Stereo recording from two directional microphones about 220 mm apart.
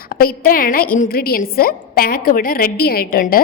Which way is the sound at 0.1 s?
40° left (ahead or behind).